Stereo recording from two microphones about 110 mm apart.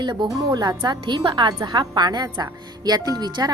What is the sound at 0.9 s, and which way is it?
A woman's voice, 45° right (ahead or behind).